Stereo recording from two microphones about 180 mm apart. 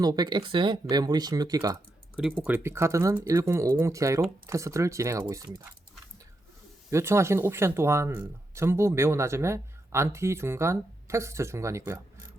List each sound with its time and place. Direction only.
0.0 s speech: 20° right (ahead or behind)
2.1 s speech: 5° right (ahead or behind)
6.9 s speech: 15° right (ahead or behind)